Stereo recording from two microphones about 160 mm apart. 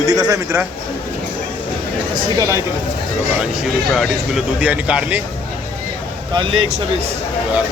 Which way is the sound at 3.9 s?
5° right (ahead or behind).